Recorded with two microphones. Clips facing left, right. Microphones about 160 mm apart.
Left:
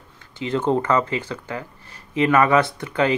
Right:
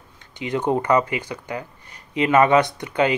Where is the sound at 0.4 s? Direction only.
15° right (ahead or behind).